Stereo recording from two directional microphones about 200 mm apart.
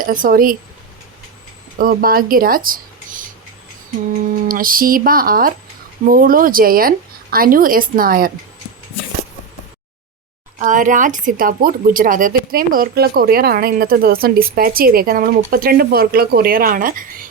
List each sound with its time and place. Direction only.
0.0 s a woman's voice: 45° right (ahead or behind)
1.8 s speech: 45° right (ahead or behind)
4.4 s a woman's voice: 45° right (ahead or behind)
10.6 s a woman's voice: 40° right (ahead or behind)